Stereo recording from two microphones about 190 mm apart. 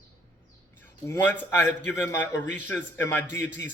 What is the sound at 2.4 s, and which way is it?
Speech, 40° right (ahead or behind).